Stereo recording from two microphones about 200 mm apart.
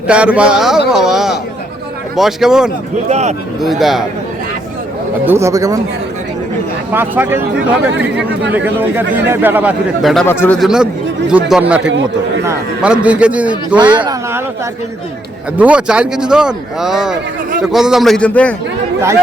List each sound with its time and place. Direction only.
0.1 s speech: 5° right (ahead or behind)
3.1 s a man's voice: 35° right (ahead or behind)
3.6 s speech: centre (ahead or behind)
5.2 s a man's voice: 10° right (ahead or behind)
6.9 s a man's voice: 10° right (ahead or behind)
8.5 s a man's voice: 10° right (ahead or behind)
11.8 s a man's voice: 65° right (ahead or behind)
12.5 s a man's voice: 5° right (ahead or behind)
13.7 s speech: 20° right (ahead or behind)
15.5 s speech: 5° right (ahead or behind)